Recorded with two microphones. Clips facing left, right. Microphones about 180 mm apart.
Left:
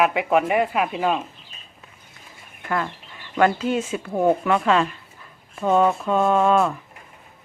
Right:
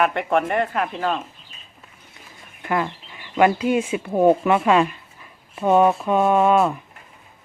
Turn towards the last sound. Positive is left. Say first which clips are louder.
# right 1 dB
turn(degrees=-20)  # may be behind; listen again after turning